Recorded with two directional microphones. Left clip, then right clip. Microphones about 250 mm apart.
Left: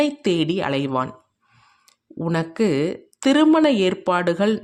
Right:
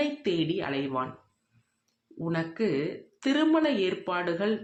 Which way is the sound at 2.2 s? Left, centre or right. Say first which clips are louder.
Left 8 dB; left.